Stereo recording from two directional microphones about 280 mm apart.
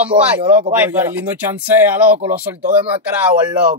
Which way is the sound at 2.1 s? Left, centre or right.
Right.